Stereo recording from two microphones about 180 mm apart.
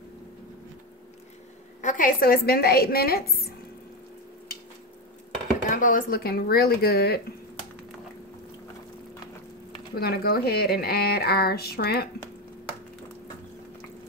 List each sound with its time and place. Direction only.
1.8 s speech: 45° left (ahead or behind)
5.7 s speech: 50° left (ahead or behind)
9.9 s speech: 60° left (ahead or behind)